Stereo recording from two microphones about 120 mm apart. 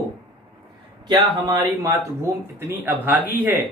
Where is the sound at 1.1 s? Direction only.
25° right (ahead or behind).